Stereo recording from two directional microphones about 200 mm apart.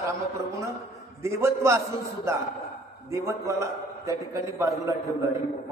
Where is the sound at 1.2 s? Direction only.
15° right (ahead or behind).